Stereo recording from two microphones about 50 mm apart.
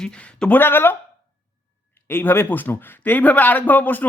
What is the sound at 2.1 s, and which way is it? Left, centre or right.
Speech, left.